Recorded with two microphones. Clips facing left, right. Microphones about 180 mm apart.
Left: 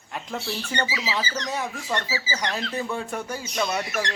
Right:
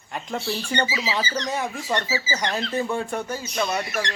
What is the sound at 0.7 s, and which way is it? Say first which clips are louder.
Speech: right 2 dB; 25° right (ahead or behind).